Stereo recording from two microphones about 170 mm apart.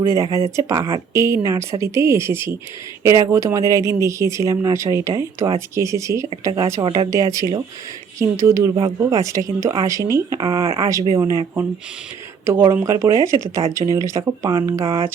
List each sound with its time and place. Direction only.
0.0 s a woman's voice: 20° right (ahead or behind)
12.7 s a woman's voice: 15° right (ahead or behind)